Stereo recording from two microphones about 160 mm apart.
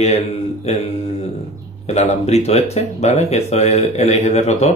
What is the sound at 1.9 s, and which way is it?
Speech, 40° left (ahead or behind).